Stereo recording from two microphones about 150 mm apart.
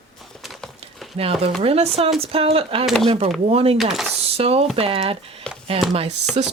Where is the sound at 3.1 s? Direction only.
45° right (ahead or behind).